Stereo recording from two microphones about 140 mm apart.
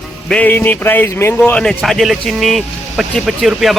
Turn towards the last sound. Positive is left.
turn(degrees=0)  # may be behind; listen again after turning